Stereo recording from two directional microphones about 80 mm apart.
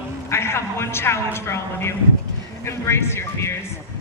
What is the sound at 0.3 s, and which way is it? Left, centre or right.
A man's voice, left.